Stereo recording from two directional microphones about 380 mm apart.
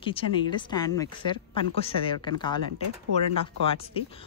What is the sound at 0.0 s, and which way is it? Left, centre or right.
A woman's voice, centre.